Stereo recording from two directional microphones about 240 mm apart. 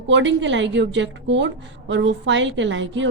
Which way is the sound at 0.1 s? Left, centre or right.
Right.